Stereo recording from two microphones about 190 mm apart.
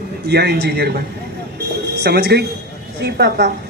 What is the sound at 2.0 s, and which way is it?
Speech, 60° right (ahead or behind).